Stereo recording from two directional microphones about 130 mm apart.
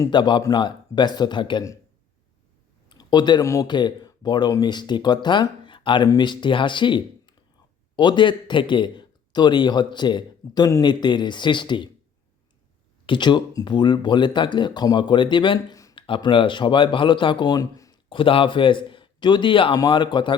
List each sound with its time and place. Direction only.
0.1 s speech: 35° left (ahead or behind)
2.9 s speech: 35° left (ahead or behind)
13.1 s speech: 35° left (ahead or behind)
18.1 s speech: 45° left (ahead or behind)